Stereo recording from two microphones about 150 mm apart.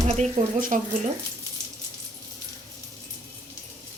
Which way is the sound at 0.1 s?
55° right (ahead or behind).